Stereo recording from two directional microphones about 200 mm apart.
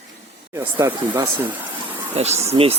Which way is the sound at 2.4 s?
30° right (ahead or behind).